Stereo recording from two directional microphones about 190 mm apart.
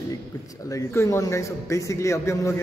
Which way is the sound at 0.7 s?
15° left (ahead or behind).